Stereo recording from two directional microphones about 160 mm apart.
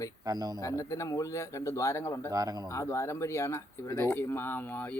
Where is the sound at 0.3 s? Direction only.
25° right (ahead or behind).